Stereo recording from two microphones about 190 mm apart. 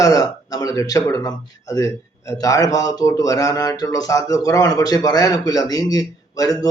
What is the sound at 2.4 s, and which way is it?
Speech, 20° left (ahead or behind).